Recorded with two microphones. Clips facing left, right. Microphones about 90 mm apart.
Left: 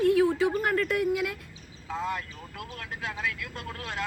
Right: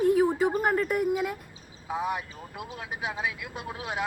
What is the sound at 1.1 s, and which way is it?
Speech, 35° right (ahead or behind).